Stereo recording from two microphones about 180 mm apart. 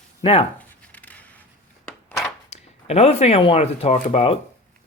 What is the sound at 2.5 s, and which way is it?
Speech, 35° left (ahead or behind).